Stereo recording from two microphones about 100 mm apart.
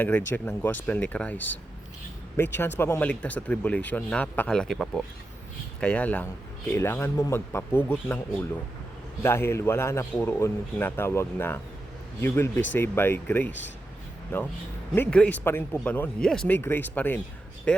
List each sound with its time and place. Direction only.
0.0 s a man's voice: 20° left (ahead or behind)
5.8 s a man's voice: 15° left (ahead or behind)
9.2 s a man's voice: 25° left (ahead or behind)